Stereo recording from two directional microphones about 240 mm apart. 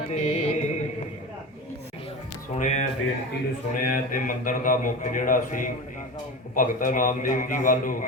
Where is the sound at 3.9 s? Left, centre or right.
Left.